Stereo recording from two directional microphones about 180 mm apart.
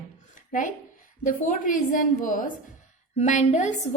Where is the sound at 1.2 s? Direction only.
45° left (ahead or behind).